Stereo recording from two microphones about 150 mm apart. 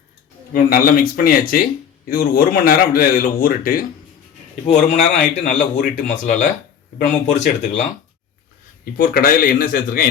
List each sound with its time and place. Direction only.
0.5 s speech: 70° left (ahead or behind)
4.6 s speech: 50° left (ahead or behind)
8.8 s speech: 70° left (ahead or behind)